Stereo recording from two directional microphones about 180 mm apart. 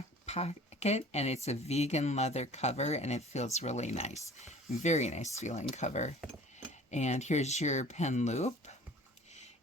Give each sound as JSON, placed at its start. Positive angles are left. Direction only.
{"t": 0.3, "sound": "speech", "side_deg": 35}